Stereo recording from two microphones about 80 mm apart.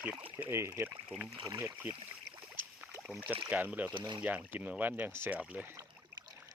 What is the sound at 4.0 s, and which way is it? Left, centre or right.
Speech, right.